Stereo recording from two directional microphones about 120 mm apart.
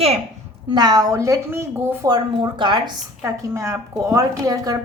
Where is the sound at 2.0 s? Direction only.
35° right (ahead or behind).